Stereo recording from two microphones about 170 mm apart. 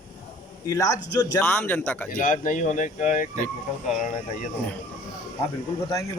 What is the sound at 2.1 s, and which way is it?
Speech, 50° left (ahead or behind).